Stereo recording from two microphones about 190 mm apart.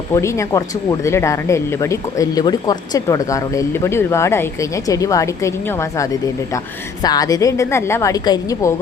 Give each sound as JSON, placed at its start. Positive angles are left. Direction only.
{"t": 0.1, "sound": "speech", "side_deg": 15}